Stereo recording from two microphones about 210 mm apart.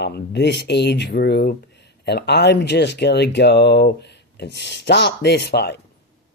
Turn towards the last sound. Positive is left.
turn(degrees=50)  # may be behind; listen again after turning